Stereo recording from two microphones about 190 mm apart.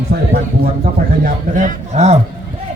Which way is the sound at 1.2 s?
45° right (ahead or behind).